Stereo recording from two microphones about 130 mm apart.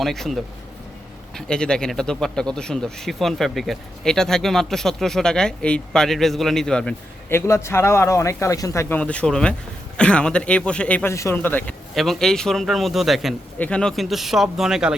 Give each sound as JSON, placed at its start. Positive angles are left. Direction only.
{"t": 0.0, "sound": "a man's voice", "side_deg": 0}
{"t": 7.3, "sound": "speech", "side_deg": 20}
{"t": 9.0, "sound": "a man's voice", "side_deg": 10}
{"t": 11.1, "sound": "a man's voice", "side_deg": 20}
{"t": 11.9, "sound": "a man's voice", "side_deg": 5}